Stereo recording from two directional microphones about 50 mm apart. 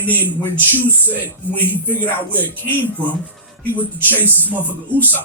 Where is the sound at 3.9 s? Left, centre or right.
Right.